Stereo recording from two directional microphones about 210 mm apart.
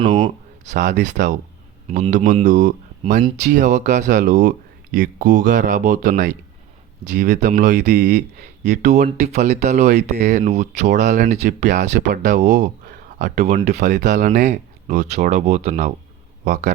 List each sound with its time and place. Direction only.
0.0 s speech: 35° right (ahead or behind)
7.3 s speech: 35° right (ahead or behind)
7.8 s speech: 50° right (ahead or behind)
8.7 s speech: 35° right (ahead or behind)